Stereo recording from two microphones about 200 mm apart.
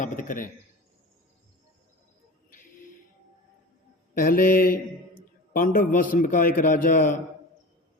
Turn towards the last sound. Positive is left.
turn(degrees=40)  # may be behind; listen again after turning